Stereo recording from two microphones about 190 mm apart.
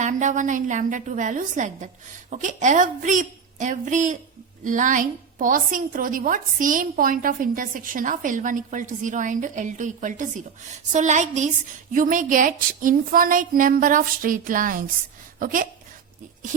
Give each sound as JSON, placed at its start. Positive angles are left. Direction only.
{"t": 0.0, "sound": "a woman's voice", "side_deg": -40}